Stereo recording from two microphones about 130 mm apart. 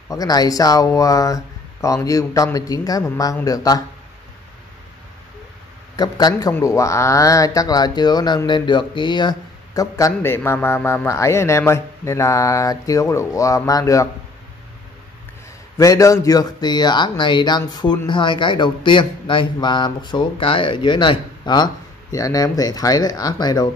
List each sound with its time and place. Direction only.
0.1 s speech: 30° left (ahead or behind)
5.9 s a man's voice: 30° left (ahead or behind)
15.8 s a man's voice: 25° left (ahead or behind)